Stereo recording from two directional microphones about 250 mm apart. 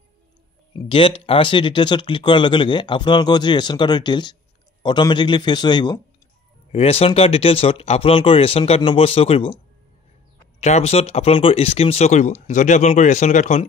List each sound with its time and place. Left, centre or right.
0.8 s a man's voice: left
10.6 s speech: left